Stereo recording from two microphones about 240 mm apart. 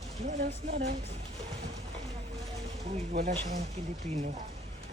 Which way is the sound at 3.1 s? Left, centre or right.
Right.